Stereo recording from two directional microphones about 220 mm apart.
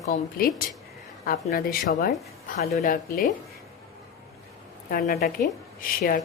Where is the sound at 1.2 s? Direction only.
40° left (ahead or behind).